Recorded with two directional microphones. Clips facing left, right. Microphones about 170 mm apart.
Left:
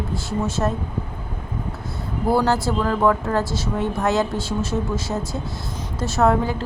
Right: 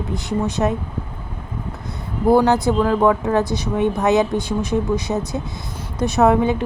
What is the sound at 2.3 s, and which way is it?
A woman's voice, 15° right (ahead or behind).